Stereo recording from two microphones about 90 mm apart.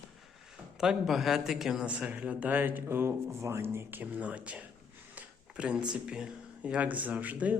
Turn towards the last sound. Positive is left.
turn(degrees=-15)  # may be behind; listen again after turning